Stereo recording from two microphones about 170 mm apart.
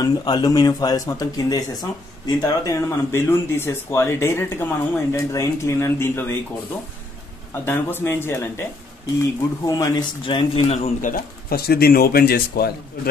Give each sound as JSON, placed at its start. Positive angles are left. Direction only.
{"t": 0.0, "sound": "speech", "side_deg": 25}
{"t": 7.6, "sound": "speech", "side_deg": 15}
{"t": 9.7, "sound": "a man's voice", "side_deg": 20}
{"t": 11.0, "sound": "speech", "side_deg": 50}